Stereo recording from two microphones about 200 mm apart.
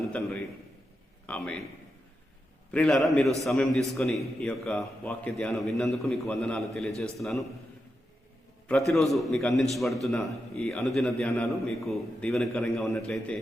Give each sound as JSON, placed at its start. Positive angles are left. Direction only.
{"t": 0.1, "sound": "a man's voice", "side_deg": 5}
{"t": 2.7, "sound": "a man's voice", "side_deg": 0}
{"t": 8.9, "sound": "a man's voice", "side_deg": 0}